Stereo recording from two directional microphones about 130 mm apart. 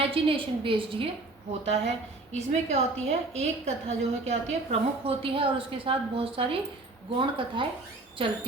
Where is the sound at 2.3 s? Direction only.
55° right (ahead or behind).